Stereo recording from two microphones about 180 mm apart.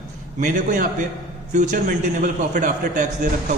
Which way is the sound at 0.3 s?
45° right (ahead or behind).